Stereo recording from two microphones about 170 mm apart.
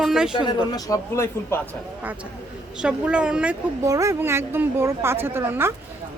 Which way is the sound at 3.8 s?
20° right (ahead or behind).